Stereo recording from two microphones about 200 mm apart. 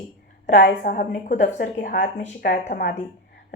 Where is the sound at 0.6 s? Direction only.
55° left (ahead or behind).